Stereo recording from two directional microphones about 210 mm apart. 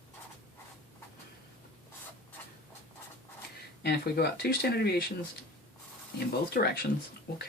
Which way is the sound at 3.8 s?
50° left (ahead or behind).